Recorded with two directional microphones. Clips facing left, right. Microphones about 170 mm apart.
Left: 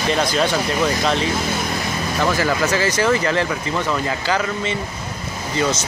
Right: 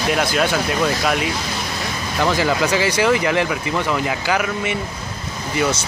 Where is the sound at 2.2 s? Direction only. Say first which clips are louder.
Right 1 dB; 15° right (ahead or behind).